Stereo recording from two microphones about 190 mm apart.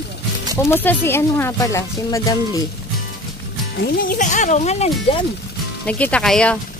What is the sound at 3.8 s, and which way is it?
Speech, 50° left (ahead or behind).